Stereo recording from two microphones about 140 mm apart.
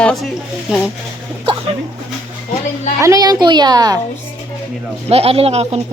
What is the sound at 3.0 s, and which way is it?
A child's voice, 25° right (ahead or behind).